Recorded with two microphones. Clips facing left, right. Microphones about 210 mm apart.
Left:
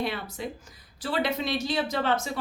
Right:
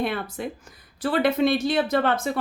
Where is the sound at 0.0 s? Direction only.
55° right (ahead or behind).